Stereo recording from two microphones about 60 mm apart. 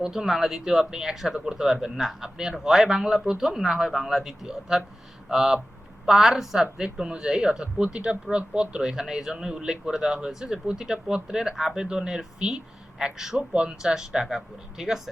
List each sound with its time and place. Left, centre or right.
0.0 s speech: centre